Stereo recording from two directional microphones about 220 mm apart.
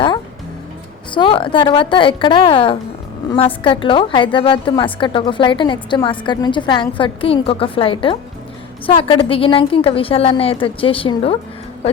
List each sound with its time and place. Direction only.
1.1 s a woman's voice: 20° left (ahead or behind)